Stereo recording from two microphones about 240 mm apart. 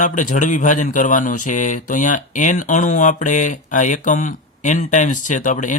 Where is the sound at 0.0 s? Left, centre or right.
Left.